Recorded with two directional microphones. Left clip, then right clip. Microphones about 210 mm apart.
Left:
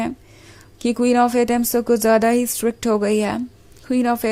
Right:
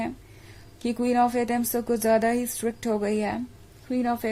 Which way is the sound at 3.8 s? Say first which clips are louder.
Left 7 dB; 30° left (ahead or behind).